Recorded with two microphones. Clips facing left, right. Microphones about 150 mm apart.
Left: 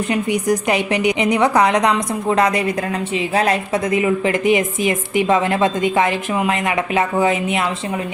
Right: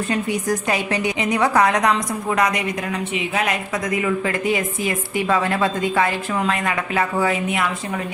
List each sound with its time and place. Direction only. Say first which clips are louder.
0.1 s a woman's voice: left 4 dB; 15° left (ahead or behind)
4.0 s a woman's voice: left 5 dB; 20° left (ahead or behind)